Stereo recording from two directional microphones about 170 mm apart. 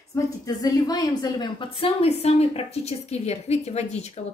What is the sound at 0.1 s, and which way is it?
A woman's voice, 20° left (ahead or behind).